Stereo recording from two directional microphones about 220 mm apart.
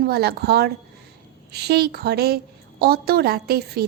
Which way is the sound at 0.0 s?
45° right (ahead or behind).